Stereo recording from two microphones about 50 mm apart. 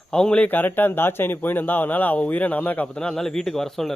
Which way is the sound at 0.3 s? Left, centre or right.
Left.